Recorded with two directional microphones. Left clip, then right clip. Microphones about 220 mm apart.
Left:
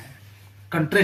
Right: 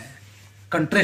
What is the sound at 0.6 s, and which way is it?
Speech, 40° right (ahead or behind).